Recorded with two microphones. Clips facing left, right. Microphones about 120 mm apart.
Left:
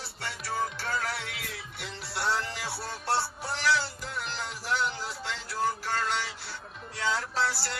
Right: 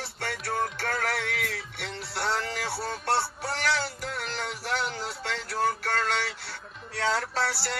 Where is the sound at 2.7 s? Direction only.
Centre (ahead or behind).